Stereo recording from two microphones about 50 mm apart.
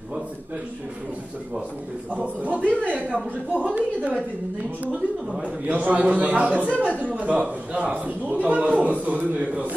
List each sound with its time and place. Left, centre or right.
2.1 s a man's voice: right
5.4 s a man's voice: right